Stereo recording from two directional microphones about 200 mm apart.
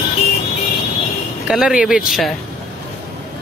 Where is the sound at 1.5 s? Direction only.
Centre (ahead or behind).